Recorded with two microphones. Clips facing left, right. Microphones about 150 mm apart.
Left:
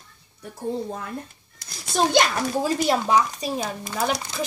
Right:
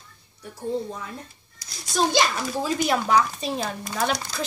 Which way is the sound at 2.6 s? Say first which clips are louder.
Left 1 dB; 35° left (ahead or behind).